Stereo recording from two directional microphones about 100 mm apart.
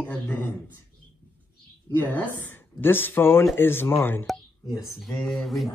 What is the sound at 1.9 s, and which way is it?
Speech, 20° left (ahead or behind).